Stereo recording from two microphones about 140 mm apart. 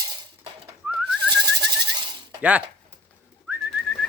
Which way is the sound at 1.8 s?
35° right (ahead or behind).